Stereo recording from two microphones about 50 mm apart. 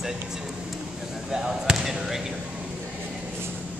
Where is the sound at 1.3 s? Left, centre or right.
Centre.